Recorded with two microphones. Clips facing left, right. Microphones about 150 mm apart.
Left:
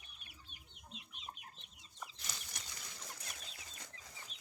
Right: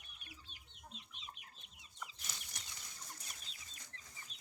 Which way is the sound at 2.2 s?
85° left.